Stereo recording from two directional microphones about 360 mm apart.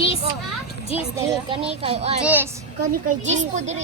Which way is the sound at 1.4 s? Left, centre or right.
Centre.